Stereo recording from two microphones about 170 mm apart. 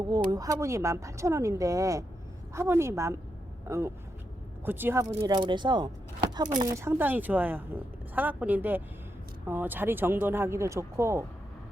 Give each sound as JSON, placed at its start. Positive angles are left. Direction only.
{"t": 0.0, "sound": "a woman's voice", "side_deg": -25}